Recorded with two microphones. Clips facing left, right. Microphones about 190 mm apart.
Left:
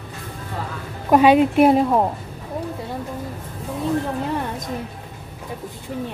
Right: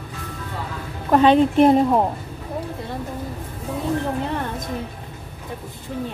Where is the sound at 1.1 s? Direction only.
10° left (ahead or behind).